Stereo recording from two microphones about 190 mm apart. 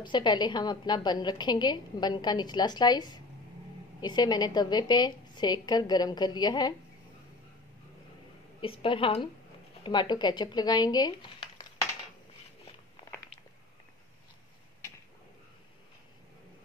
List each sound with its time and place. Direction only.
0.0 s a woman's voice: 25° left (ahead or behind)
8.5 s a woman's voice: 30° left (ahead or behind)